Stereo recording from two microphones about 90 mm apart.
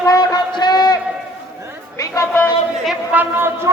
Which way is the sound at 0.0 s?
45° left (ahead or behind).